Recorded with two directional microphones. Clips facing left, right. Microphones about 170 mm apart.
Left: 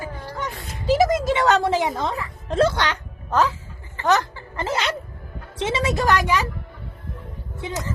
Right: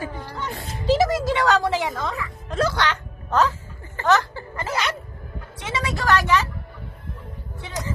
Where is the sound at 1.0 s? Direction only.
20° left (ahead or behind).